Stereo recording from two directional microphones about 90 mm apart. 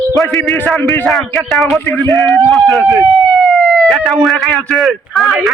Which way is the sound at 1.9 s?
30° left (ahead or behind).